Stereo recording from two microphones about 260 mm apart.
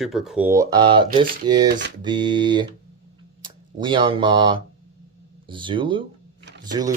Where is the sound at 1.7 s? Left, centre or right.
Right.